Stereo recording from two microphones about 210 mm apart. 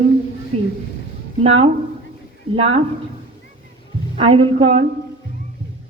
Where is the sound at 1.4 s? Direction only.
30° right (ahead or behind).